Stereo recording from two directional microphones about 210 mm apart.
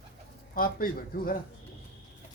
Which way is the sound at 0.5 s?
45° left (ahead or behind).